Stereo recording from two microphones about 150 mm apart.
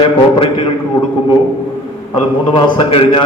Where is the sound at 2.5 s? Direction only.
35° left (ahead or behind).